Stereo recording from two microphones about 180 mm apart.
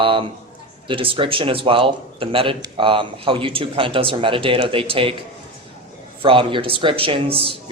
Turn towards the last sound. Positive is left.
turn(degrees=-30)  # may be behind; listen again after turning